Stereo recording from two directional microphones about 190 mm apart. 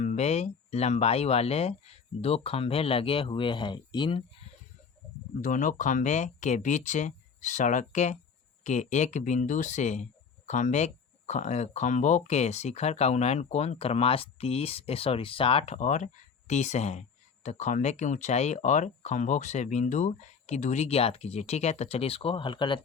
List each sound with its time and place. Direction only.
0.0 s speech: 35° left (ahead or behind)
5.4 s speech: 45° left (ahead or behind); by 22.8 s 25° left (ahead or behind)